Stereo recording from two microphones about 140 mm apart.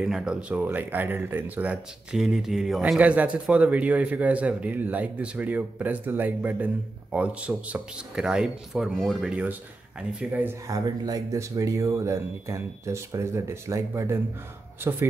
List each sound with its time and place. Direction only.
0.0 s speech: 5° right (ahead or behind)
10.7 s speech: 25° right (ahead or behind)